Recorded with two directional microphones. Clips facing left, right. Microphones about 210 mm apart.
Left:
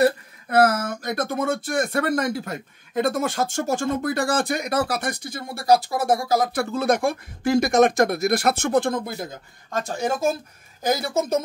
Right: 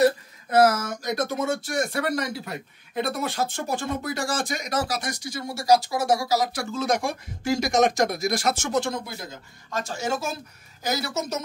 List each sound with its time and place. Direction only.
0.5 s a woman's voice: 60° left (ahead or behind)